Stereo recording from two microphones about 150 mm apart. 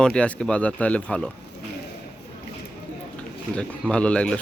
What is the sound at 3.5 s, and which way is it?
Speech, 5° left (ahead or behind).